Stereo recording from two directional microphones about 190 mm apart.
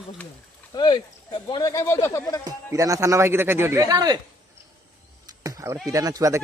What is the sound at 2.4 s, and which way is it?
Speech, 15° right (ahead or behind).